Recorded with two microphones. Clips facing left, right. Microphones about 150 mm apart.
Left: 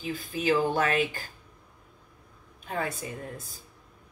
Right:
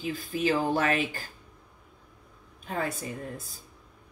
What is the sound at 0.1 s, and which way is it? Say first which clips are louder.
Speech: left 1 dB; 45° right (ahead or behind).